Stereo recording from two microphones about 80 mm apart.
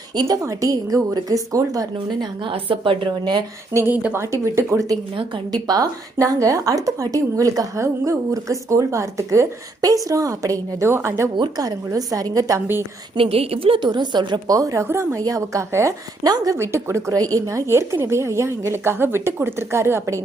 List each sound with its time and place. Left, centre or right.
0.3 s speech: right
2.4 s a woman's voice: right
3.7 s a woman's voice: right
4.2 s a woman's voice: right
5.1 s speech: right
10.8 s a woman's voice: right
11.5 s speech: right
13.2 s a woman's voice: right
13.7 s a woman's voice: right
14.5 s a woman's voice: right
16.2 s speech: right
16.6 s a woman's voice: right